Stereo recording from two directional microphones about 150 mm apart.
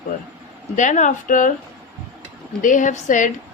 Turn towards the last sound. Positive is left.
turn(degrees=60)  # may be behind; listen again after turning